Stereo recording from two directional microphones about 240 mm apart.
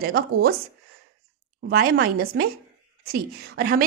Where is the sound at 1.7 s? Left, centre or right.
Right.